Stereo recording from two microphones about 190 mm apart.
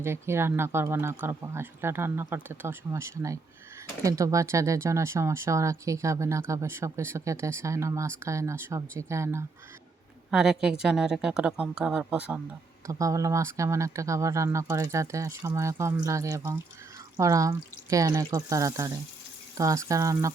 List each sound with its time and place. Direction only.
0.0 s speech: 10° right (ahead or behind)
10.3 s a woman's voice: 5° right (ahead or behind)
12.9 s speech: 15° right (ahead or behind)